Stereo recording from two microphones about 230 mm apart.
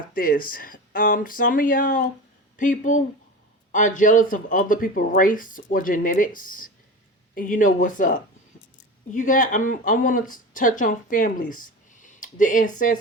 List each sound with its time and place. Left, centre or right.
0.1 s speech: left